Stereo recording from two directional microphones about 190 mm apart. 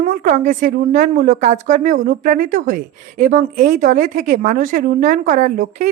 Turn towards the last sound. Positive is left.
turn(degrees=-40)  # may be behind; listen again after turning